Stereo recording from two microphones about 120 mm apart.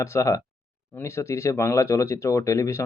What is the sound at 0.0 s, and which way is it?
Speech, 25° left (ahead or behind).